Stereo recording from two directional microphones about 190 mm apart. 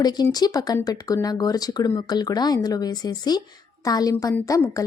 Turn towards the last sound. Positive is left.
turn(degrees=15)  # may be behind; listen again after turning